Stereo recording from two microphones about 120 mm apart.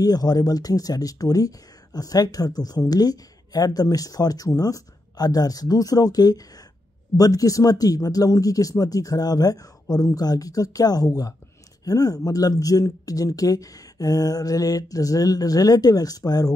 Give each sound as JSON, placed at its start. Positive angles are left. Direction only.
{"t": 0.0, "sound": "speech", "side_deg": 35}